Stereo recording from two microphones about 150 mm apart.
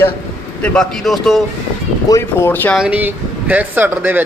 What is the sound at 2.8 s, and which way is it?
Speech, 10° right (ahead or behind).